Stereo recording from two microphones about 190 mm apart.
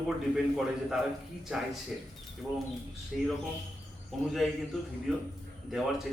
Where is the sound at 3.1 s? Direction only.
Centre (ahead or behind).